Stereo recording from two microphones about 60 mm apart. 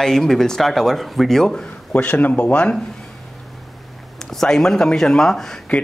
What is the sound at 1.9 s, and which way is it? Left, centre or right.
Speech, left.